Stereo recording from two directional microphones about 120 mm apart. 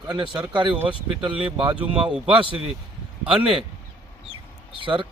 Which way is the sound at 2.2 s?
45° right (ahead or behind).